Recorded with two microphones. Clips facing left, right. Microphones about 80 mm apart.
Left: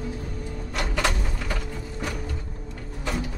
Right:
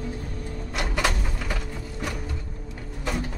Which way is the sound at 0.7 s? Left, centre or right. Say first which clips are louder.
Even; centre.